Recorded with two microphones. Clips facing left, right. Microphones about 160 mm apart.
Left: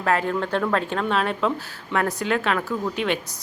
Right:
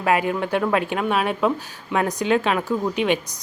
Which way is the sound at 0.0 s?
10° right (ahead or behind).